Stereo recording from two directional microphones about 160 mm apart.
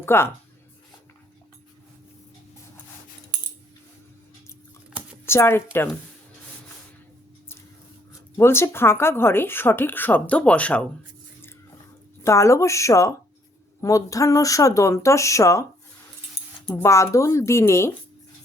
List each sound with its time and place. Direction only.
0.0 s a woman's voice: 15° left (ahead or behind)
5.2 s speech: 15° left (ahead or behind)
8.4 s a woman's voice: 15° left (ahead or behind)
12.2 s speech: 20° left (ahead or behind)
16.6 s a woman's voice: 15° left (ahead or behind)